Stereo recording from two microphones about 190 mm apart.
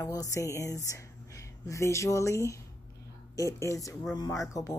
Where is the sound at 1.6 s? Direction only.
15° left (ahead or behind).